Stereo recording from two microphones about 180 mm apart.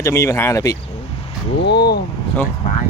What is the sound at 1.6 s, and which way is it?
Speech, 70° left (ahead or behind).